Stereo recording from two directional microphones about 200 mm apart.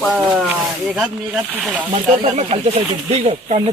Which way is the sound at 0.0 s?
Centre (ahead or behind).